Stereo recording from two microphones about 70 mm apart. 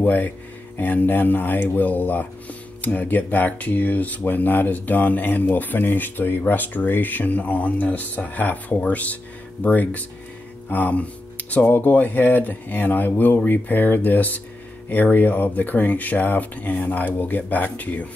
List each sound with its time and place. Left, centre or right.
0.0 s speech: left